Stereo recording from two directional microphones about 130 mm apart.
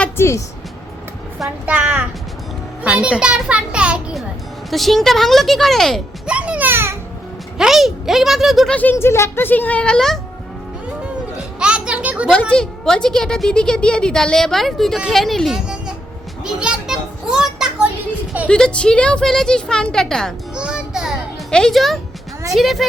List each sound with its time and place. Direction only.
0.2 s speech: 20° left (ahead or behind)
1.6 s a child's voice: 10° right (ahead or behind)
6.2 s a child's voice: 10° right (ahead or behind)
7.6 s a woman's voice: centre (ahead or behind)
8.7 s speech: 15° left (ahead or behind)
11.6 s a sound: 10° right (ahead or behind)
12.3 s a woman's voice: 5° left (ahead or behind)
18.4 s a woman's voice: 5° left (ahead or behind)
20.6 s children playing: 5° right (ahead or behind)
21.5 s a woman's voice: 5° left (ahead or behind)